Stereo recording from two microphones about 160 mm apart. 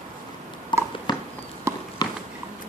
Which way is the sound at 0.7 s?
30° left (ahead or behind).